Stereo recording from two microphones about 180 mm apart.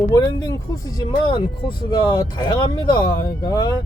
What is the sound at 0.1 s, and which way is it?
Speech, 20° left (ahead or behind).